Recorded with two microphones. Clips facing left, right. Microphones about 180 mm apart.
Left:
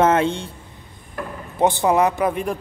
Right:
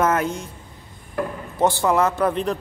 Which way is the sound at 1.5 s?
20° left (ahead or behind).